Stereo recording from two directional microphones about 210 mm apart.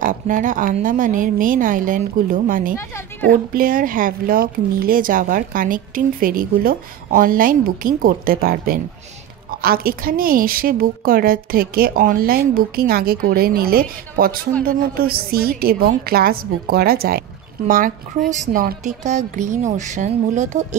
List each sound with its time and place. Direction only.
0.0 s a woman's voice: 40° right (ahead or behind)